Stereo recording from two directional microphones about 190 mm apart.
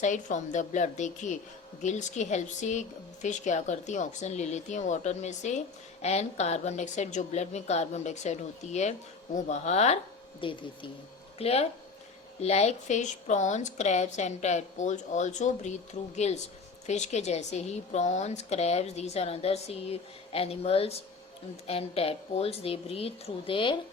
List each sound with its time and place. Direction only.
0.0 s a woman's voice: 40° left (ahead or behind)